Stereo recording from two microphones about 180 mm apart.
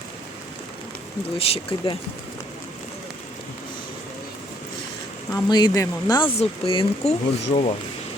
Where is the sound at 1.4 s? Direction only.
30° left (ahead or behind).